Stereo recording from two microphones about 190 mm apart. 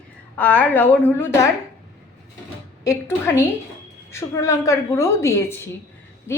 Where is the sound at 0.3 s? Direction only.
10° left (ahead or behind).